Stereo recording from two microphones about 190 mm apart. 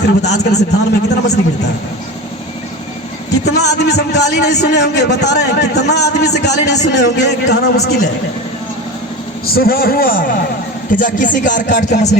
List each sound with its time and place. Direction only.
0.0 s a man's voice: 60° left (ahead or behind)
3.4 s a man's voice: 60° left (ahead or behind)
9.6 s a sound: 50° left (ahead or behind)